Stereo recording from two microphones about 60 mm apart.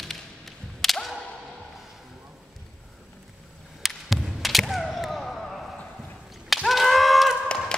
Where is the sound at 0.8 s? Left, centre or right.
Centre.